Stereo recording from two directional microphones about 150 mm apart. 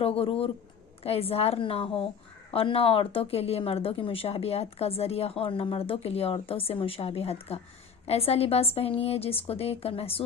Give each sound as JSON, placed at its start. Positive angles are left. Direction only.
{"t": 0.0, "sound": "speech", "side_deg": 40}